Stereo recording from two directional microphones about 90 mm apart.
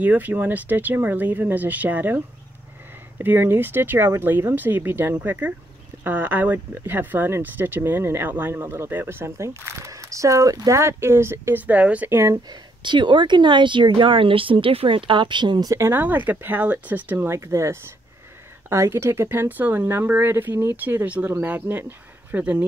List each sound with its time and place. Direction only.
0.0 s speech: 20° right (ahead or behind)
12.1 s speech: 30° right (ahead or behind)
12.4 s speech: 60° right (ahead or behind)
15.7 s speech: 30° right (ahead or behind)